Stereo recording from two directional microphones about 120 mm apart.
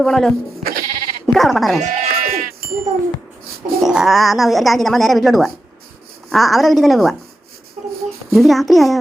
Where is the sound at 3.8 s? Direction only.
5° right (ahead or behind).